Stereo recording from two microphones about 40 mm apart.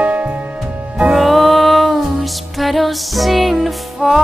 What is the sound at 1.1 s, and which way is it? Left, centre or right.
Music, centre.